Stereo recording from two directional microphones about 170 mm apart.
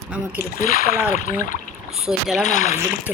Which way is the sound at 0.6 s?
55° left (ahead or behind).